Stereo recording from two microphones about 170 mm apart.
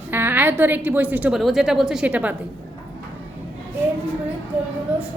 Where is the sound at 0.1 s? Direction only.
10° right (ahead or behind).